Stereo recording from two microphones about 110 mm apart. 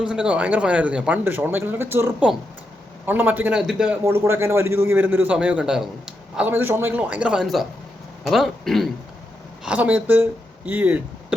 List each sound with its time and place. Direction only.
0.0 s a man's voice: 10° right (ahead or behind)
3.6 s speech: 5° right (ahead or behind)
4.0 s a man's voice: 25° right (ahead or behind); by 8.9 s centre (ahead or behind)
9.6 s a man's voice: 15° right (ahead or behind)